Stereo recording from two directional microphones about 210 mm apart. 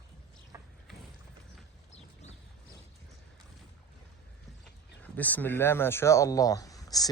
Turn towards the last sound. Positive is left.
turn(degrees=15)  # may be behind; listen again after turning